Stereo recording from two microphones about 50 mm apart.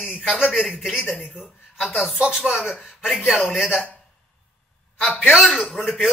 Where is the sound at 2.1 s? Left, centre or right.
Centre.